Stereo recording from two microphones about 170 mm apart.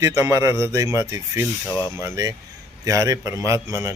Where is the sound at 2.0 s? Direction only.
15° right (ahead or behind).